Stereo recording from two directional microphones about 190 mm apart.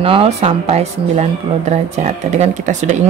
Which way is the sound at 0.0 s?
30° right (ahead or behind).